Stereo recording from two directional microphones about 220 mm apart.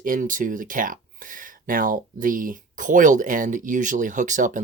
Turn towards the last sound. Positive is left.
turn(degrees=-35)  # may be behind; listen again after turning